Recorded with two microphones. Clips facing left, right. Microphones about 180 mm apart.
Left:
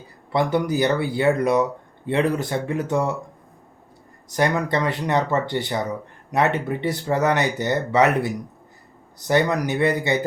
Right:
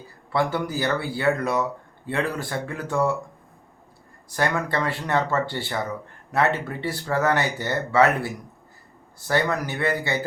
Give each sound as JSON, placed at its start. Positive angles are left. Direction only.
{"t": 0.3, "sound": "speech", "side_deg": 20}
{"t": 4.4, "sound": "speech", "side_deg": 20}